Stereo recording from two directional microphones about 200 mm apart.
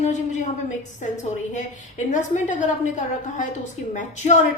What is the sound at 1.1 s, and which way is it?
A woman's voice, 35° left (ahead or behind).